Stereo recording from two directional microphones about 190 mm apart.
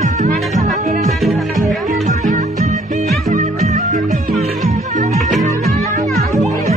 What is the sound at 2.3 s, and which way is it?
Music, 40° right (ahead or behind).